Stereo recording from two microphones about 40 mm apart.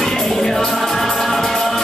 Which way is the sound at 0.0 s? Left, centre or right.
Centre.